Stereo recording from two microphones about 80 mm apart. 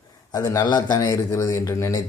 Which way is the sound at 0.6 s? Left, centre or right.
Left.